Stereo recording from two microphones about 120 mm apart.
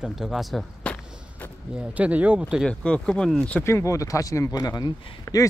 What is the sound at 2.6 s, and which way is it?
Speech, 5° left (ahead or behind).